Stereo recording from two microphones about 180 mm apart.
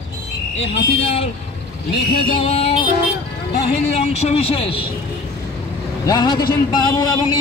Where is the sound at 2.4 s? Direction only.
35° left (ahead or behind).